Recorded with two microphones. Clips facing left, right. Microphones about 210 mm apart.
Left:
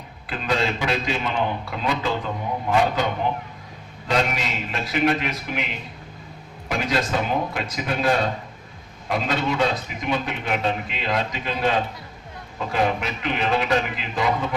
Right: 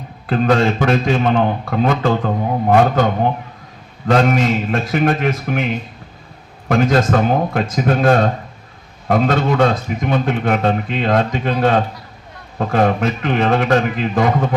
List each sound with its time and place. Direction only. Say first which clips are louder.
0.3 s a man's voice: right 10 dB; 50° right (ahead or behind)
6.7 s a man's voice: right 9 dB; 50° right (ahead or behind)